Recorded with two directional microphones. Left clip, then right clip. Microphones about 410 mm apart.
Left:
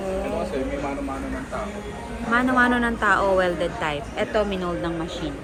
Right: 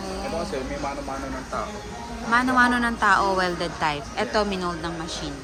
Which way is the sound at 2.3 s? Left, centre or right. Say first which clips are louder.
Even; centre.